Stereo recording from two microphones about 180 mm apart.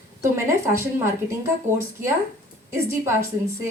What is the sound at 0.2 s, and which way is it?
Speech, 15° right (ahead or behind).